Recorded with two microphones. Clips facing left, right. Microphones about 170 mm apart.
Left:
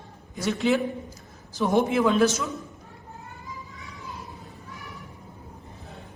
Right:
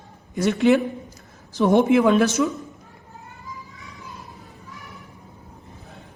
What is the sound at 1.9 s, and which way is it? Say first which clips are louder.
Speech: right 4 dB; 60° right (ahead or behind).